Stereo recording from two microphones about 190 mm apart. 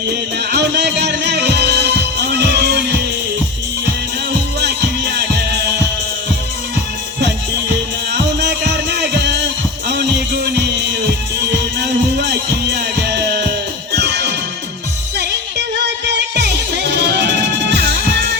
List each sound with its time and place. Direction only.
0.3 s music: 60° right (ahead or behind)
7.2 s music: 60° right (ahead or behind)
12.1 s music: 60° right (ahead or behind)
15.2 s music: 60° right (ahead or behind)